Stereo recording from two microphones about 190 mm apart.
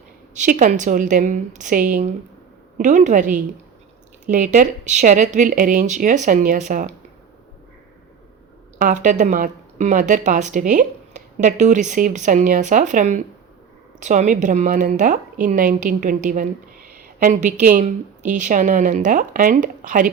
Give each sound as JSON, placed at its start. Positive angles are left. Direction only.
{"t": 0.3, "sound": "a woman's voice", "side_deg": -45}
{"t": 8.8, "sound": "a woman's voice", "side_deg": -40}